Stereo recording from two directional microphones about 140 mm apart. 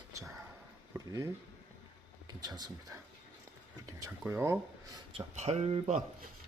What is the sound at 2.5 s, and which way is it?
Speech, 30° right (ahead or behind).